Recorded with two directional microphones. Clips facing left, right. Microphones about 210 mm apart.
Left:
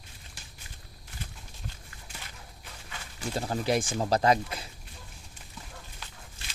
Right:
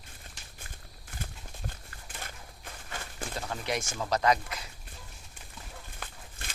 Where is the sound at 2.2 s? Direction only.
50° right (ahead or behind).